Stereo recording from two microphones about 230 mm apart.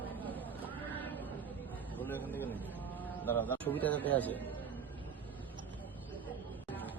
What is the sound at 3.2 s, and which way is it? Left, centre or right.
A man's voice, centre.